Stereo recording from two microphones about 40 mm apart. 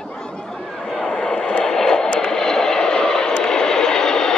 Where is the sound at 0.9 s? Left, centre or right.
Centre.